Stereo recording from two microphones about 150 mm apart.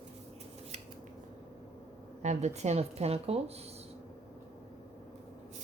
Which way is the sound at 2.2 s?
50° right (ahead or behind).